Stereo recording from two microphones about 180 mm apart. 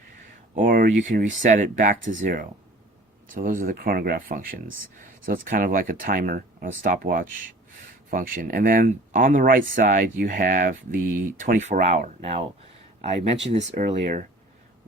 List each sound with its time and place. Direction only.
0.5 s speech: 50° right (ahead or behind)